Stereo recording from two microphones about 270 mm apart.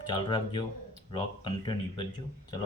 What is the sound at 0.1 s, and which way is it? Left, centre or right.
Speech, centre.